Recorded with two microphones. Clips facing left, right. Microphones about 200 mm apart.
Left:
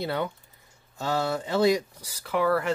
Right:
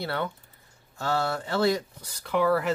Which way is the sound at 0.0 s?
15° left (ahead or behind).